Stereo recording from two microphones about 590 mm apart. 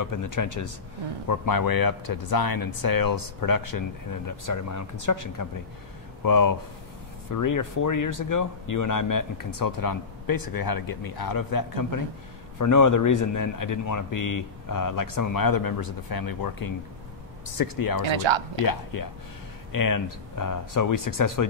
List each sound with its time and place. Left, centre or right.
0.0 s speech: left
18.0 s speech: right
18.7 s speech: left